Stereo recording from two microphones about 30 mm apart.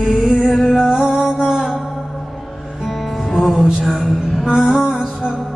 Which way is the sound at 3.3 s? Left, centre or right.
Centre.